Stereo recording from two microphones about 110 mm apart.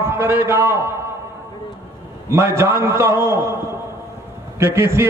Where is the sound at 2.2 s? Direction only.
25° right (ahead or behind).